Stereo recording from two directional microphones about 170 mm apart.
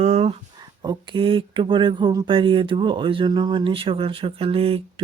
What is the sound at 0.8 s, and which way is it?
Speech, 25° right (ahead or behind).